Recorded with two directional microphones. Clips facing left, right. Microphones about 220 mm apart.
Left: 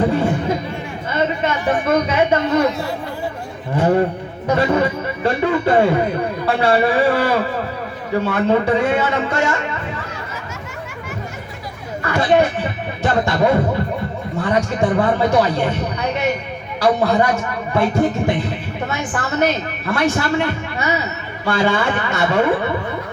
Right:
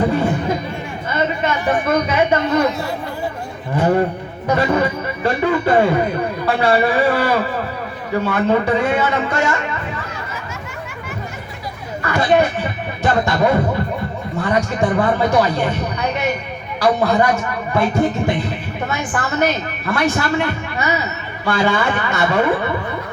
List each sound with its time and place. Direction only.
0.0 s chatter: 30° left (ahead or behind)
1.1 s a man's voice: 25° left (ahead or behind)
3.8 s a woman's voice: 30° left (ahead or behind)
12.0 s a woman's voice: 25° left (ahead or behind)